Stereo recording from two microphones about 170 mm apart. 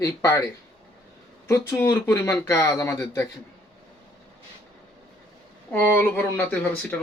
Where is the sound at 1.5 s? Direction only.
15° left (ahead or behind).